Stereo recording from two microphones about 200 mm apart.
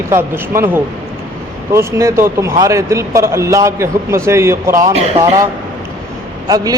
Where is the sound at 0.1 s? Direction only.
10° right (ahead or behind).